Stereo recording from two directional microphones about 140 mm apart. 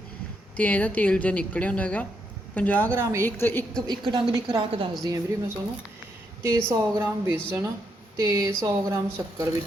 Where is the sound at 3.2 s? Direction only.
15° left (ahead or behind).